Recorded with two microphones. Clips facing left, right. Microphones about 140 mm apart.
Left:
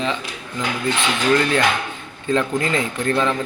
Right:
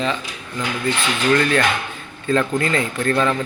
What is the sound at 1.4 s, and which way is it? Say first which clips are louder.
A man's voice: even; 15° left (ahead or behind).